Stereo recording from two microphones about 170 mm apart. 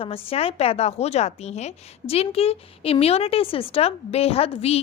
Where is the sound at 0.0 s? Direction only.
35° left (ahead or behind).